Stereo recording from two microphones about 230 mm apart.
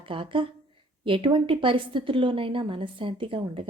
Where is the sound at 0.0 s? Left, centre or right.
Right.